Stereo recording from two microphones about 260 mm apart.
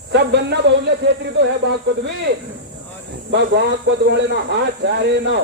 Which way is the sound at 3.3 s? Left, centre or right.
Right.